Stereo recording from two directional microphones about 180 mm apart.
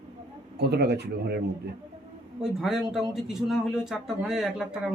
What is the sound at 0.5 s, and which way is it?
Speech, 65° right (ahead or behind).